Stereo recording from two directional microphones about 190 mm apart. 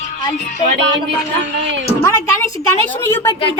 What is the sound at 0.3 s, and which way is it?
Music, 40° left (ahead or behind).